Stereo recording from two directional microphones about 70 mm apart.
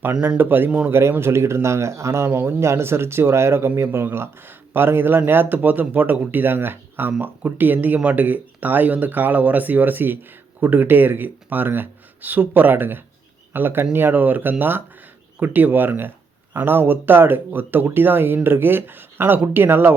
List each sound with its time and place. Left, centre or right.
0.3 s speech: right
0.9 s speech: right